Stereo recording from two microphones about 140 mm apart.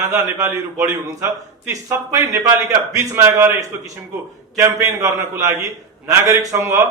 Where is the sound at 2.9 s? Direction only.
20° right (ahead or behind).